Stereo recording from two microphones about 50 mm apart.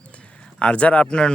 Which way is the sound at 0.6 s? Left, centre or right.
Left.